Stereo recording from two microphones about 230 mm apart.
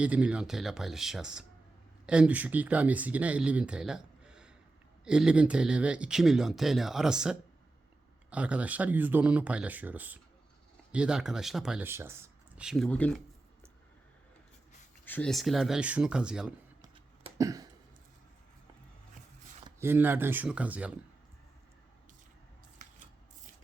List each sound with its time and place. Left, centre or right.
0.0 s speech: centre
15.0 s speech: centre
16.8 s a sound: centre
19.6 s speech: centre